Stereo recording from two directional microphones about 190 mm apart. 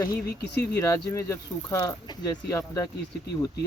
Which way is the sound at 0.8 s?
15° left (ahead or behind).